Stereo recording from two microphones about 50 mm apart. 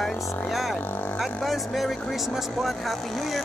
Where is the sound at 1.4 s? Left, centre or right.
Centre.